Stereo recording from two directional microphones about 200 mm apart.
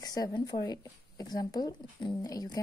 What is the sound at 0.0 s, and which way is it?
A woman's voice, 20° left (ahead or behind).